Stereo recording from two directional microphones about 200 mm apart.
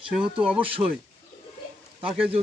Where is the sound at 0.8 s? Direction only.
20° right (ahead or behind).